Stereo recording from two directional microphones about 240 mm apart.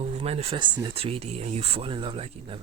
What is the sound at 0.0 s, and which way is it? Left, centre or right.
Speech, right.